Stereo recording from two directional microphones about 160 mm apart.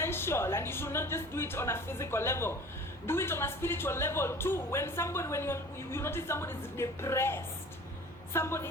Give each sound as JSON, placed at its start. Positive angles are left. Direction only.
{"t": 0.0, "sound": "speech", "side_deg": 15}